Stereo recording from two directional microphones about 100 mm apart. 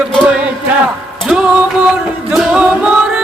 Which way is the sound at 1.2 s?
5° right (ahead or behind).